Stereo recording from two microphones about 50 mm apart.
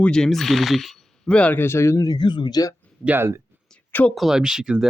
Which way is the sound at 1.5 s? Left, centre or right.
Left.